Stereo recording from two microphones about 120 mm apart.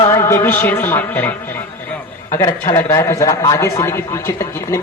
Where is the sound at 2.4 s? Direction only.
25° left (ahead or behind).